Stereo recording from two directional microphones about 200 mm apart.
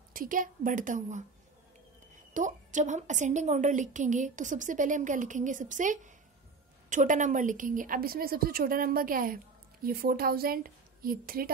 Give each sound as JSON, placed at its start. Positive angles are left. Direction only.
{"t": 0.1, "sound": "a woman's voice", "side_deg": -45}
{"t": 2.3, "sound": "a woman's voice", "side_deg": -40}